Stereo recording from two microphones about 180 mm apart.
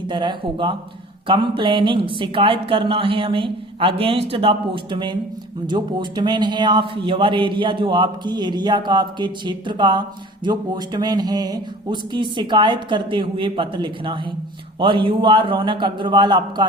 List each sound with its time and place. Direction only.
0.1 s a man's voice: 25° right (ahead or behind)